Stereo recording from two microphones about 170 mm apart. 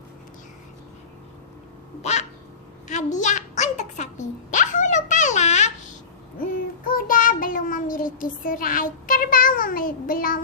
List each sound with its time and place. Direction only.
2.0 s duck: 40° left (ahead or behind)
2.9 s a sound: 45° left (ahead or behind)
6.4 s child singing: 55° left (ahead or behind)